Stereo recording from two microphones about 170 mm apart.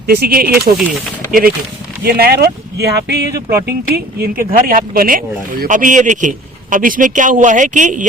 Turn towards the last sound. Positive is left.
turn(degrees=-50)  # may be behind; listen again after turning